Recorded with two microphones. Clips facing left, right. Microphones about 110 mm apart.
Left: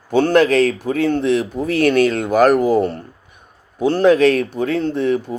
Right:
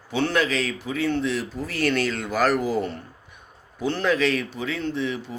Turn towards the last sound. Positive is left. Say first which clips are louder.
# left 9 dB
turn(degrees=50)  # may be behind; listen again after turning